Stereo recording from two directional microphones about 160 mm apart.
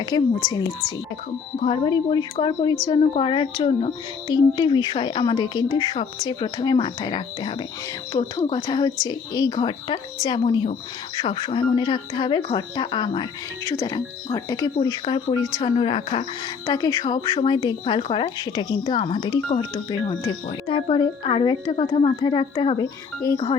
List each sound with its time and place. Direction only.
0.0 s speech: 25° left (ahead or behind)
1.6 s speech: 35° left (ahead or behind)
16.6 s speech: 25° left (ahead or behind)